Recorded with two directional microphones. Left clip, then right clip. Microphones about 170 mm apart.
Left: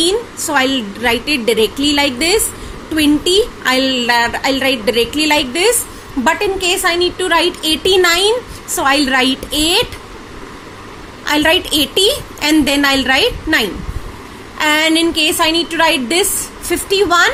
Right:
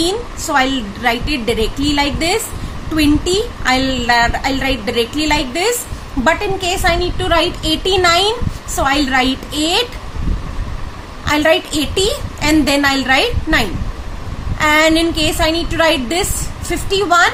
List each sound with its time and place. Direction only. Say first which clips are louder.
0.0 s a woman's voice: left 3 dB; 20° left (ahead or behind)
11.3 s a woman's voice: left 1 dB; 20° left (ahead or behind)